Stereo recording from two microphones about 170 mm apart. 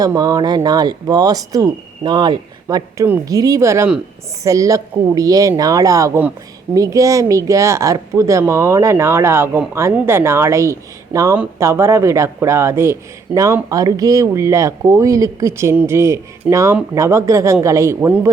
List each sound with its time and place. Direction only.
0.0 s a man's voice: 20° right (ahead or behind)